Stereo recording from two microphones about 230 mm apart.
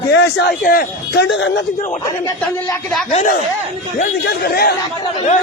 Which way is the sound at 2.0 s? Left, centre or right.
Centre.